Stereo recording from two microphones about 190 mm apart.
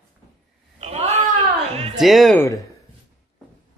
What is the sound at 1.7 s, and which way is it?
Music, 35° right (ahead or behind).